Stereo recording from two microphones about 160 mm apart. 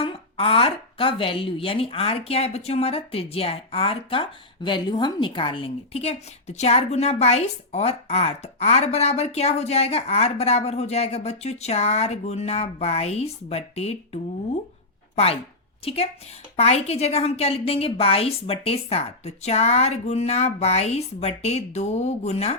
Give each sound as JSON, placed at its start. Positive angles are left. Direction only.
{"t": 0.0, "sound": "a woman's voice", "side_deg": 35}